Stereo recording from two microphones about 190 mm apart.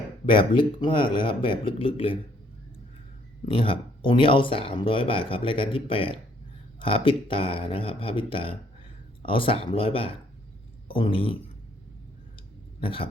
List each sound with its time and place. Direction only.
0.3 s speech: 25° left (ahead or behind)
3.4 s speech: 30° left (ahead or behind)
12.8 s a sound: 30° left (ahead or behind)